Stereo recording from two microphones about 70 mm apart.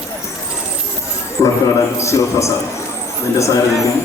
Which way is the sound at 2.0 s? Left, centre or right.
Left.